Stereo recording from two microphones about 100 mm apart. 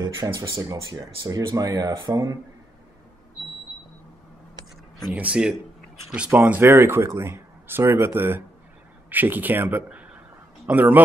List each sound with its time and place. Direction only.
0.0 s speech: 45° right (ahead or behind)
5.1 s speech: 10° right (ahead or behind)